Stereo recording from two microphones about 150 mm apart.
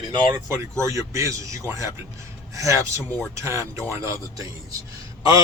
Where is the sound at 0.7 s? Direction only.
20° right (ahead or behind).